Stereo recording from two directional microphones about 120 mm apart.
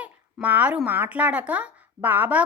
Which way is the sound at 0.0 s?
10° right (ahead or behind).